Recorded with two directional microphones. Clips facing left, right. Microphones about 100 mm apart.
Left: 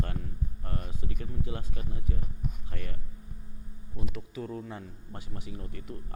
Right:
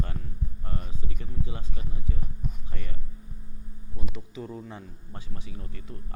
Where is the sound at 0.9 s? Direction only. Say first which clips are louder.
Left 1 dB; 20° right (ahead or behind).